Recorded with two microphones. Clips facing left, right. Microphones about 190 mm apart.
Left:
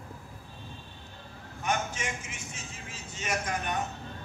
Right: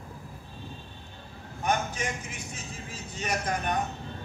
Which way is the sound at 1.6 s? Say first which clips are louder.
Right 3 dB; 35° right (ahead or behind).